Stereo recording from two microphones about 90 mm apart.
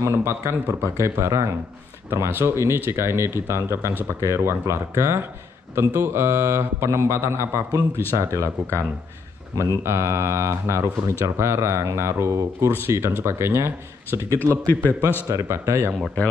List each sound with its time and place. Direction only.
0.0 s speech: 30° right (ahead or behind)
9.6 s speech: 30° right (ahead or behind)
14.5 s a man's voice: 20° left (ahead or behind)
15.2 s speech: 35° right (ahead or behind)